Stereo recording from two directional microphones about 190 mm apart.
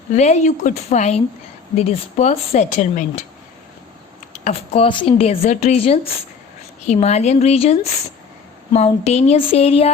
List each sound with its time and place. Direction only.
0.1 s speech: 35° left (ahead or behind)
4.3 s speech: 35° left (ahead or behind)